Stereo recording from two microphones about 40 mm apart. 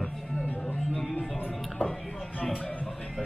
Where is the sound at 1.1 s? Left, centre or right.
Left.